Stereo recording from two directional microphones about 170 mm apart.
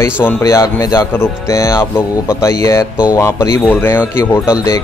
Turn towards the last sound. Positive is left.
turn(degrees=15)  # may be behind; listen again after turning